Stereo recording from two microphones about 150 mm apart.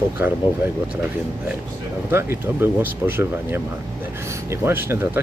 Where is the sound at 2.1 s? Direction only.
15° right (ahead or behind).